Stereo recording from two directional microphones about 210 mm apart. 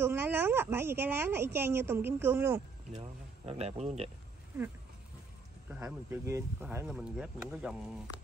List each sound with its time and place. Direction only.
0.0 s a woman's voice: 10° right (ahead or behind)
2.9 s speech: 30° right (ahead or behind)
5.9 s a woman's voice: 10° right (ahead or behind)